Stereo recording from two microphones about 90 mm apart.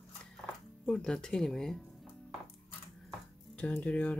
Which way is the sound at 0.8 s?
10° left (ahead or behind).